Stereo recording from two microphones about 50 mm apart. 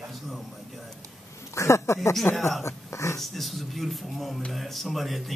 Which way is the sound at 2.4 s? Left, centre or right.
Centre.